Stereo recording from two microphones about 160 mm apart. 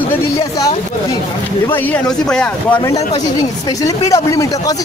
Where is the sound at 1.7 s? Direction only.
5° left (ahead or behind).